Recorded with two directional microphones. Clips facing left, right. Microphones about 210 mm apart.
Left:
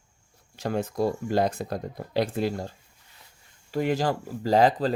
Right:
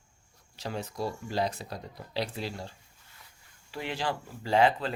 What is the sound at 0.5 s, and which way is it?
Speech, 50° left (ahead or behind).